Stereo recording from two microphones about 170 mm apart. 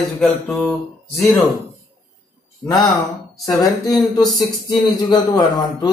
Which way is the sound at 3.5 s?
20° left (ahead or behind).